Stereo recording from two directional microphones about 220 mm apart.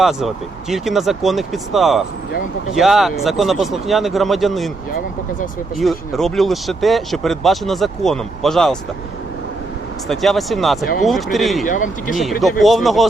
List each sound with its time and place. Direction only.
0.0 s speech: centre (ahead or behind)
5.7 s speech: centre (ahead or behind)
10.1 s speech: centre (ahead or behind)
11.6 s speech: 35° left (ahead or behind)
12.4 s speech: centre (ahead or behind)